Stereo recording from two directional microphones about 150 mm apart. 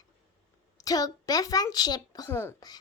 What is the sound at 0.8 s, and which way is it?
Speech, 25° left (ahead or behind).